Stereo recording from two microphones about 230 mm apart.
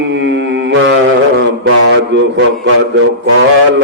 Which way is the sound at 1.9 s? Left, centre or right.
Right.